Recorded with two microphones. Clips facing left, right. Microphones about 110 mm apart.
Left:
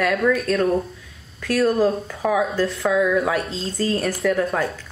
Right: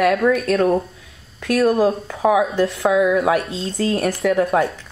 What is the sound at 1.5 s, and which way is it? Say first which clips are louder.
A woman's voice: right 2 dB; 15° right (ahead or behind).